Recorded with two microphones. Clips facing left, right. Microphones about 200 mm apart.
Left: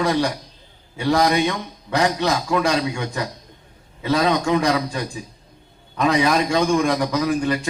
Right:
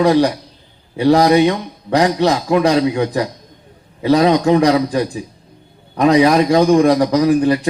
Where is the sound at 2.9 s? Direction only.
35° right (ahead or behind).